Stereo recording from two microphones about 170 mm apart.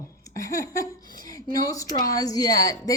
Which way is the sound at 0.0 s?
20° left (ahead or behind).